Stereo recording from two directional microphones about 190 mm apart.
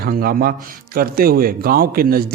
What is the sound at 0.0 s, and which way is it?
A man's voice, 50° right (ahead or behind).